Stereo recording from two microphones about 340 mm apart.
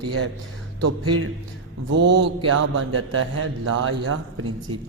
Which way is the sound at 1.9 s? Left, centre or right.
Right.